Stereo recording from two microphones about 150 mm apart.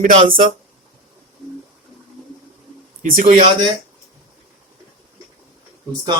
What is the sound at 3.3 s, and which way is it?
Speech, 45° right (ahead or behind).